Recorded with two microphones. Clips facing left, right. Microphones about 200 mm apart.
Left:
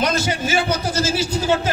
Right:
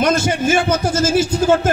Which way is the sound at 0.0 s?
50° right (ahead or behind).